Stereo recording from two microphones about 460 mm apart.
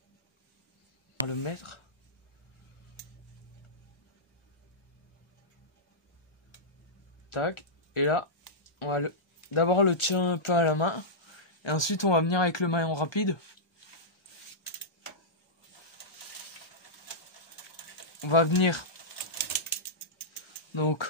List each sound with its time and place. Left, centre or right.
1.2 s speech: left
7.2 s speech: left
18.2 s speech: left
20.7 s speech: left